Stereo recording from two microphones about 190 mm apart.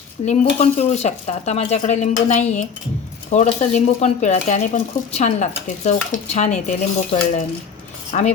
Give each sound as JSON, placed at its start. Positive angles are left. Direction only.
{"t": 0.2, "sound": "dishes", "side_deg": 25}
{"t": 0.6, "sound": "speech", "side_deg": 35}